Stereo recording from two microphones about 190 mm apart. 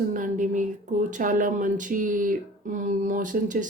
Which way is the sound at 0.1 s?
45° right (ahead or behind).